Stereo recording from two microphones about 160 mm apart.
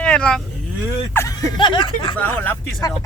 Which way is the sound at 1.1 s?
10° left (ahead or behind).